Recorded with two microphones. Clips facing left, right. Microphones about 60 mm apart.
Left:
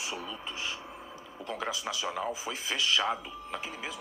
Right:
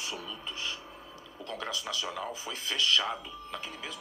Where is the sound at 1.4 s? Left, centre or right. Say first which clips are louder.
Left 2 dB; centre.